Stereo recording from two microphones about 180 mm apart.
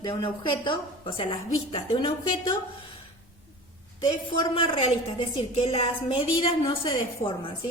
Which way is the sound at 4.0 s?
25° left (ahead or behind).